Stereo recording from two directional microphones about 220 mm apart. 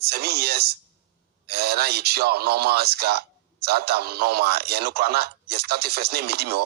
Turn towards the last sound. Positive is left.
turn(degrees=-45)  # may be behind; listen again after turning